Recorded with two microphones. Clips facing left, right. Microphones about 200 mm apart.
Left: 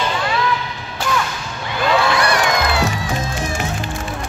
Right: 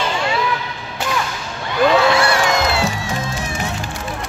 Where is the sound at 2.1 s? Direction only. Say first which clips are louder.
Right 1 dB; 25° right (ahead or behind).